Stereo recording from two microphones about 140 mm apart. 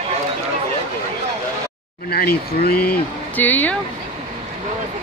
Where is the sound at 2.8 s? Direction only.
10° left (ahead or behind).